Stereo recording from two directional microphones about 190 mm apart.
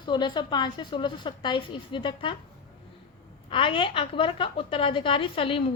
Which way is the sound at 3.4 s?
25° left (ahead or behind).